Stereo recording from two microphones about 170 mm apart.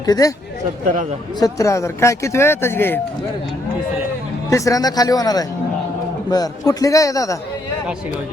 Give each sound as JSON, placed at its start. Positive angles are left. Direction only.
{"t": 0.0, "sound": "speech", "side_deg": 20}
{"t": 1.5, "sound": "speech", "side_deg": 15}
{"t": 4.4, "sound": "speech", "side_deg": 20}